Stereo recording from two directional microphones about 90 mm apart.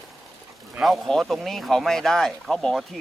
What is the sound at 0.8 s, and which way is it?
Speech, centre (ahead or behind).